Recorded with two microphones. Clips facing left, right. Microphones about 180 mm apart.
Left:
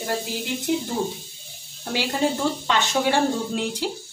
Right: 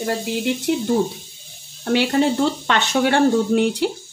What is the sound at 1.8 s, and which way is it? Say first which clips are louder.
Speech: right 6 dB; 65° right (ahead or behind).